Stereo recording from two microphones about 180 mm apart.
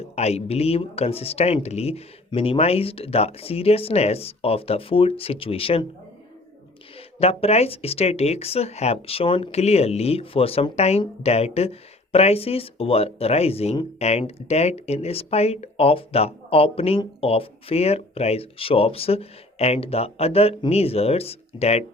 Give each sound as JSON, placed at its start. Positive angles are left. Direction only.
{"t": 0.2, "sound": "speech", "side_deg": 35}
{"t": 7.2, "sound": "speech", "side_deg": 35}